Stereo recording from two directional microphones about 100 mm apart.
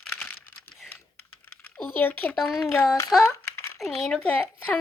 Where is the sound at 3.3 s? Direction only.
30° left (ahead or behind).